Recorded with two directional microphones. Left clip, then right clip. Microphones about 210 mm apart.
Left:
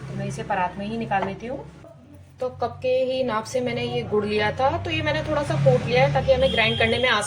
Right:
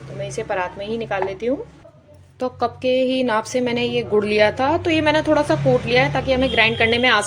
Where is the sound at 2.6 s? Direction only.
50° right (ahead or behind).